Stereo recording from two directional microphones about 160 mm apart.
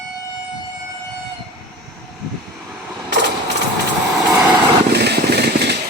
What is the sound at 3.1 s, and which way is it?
Sewing machine, 90° right.